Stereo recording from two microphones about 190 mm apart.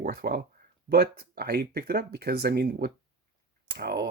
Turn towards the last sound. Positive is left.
turn(degrees=-55)  # may be behind; listen again after turning